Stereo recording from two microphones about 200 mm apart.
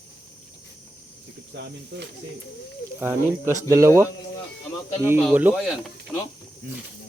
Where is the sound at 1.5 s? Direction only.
60° right (ahead or behind).